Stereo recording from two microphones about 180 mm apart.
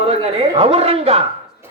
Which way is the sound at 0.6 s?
35° right (ahead or behind).